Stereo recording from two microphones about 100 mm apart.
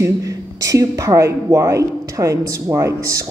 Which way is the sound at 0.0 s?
35° right (ahead or behind).